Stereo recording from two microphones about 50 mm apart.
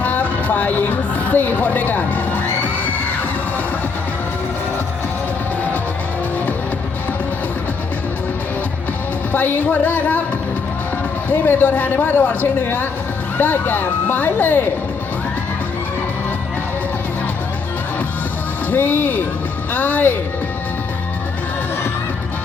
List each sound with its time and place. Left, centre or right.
0.0 s music: left
9.3 s speech: left
11.3 s speech: left
18.7 s speech: left